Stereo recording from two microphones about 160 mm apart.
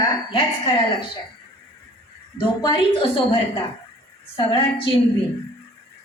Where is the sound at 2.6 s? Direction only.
30° left (ahead or behind).